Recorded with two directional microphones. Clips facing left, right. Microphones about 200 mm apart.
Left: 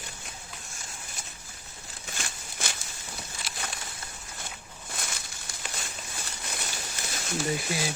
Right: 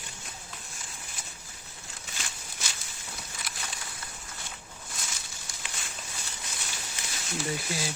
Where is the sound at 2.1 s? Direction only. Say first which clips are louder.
Left 4 dB; 55° left (ahead or behind).